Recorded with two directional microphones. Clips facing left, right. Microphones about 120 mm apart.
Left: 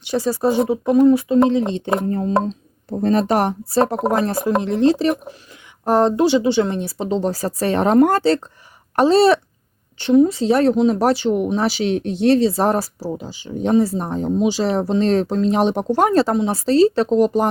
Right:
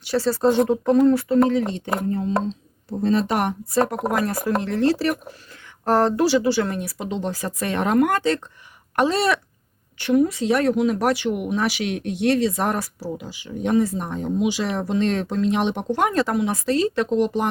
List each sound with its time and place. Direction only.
0.0 s speech: 15° left (ahead or behind)
2.0 s speech: 45° left (ahead or behind)